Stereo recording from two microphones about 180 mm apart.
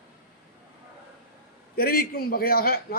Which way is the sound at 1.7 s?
55° left (ahead or behind).